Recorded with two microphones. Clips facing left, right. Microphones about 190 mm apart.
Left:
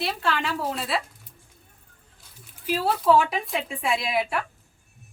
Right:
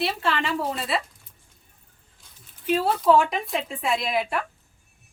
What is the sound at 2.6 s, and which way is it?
A woman's voice, centre (ahead or behind).